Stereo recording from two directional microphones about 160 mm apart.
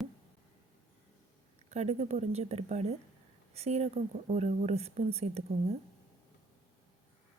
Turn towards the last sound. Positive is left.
turn(degrees=-40)  # may be behind; listen again after turning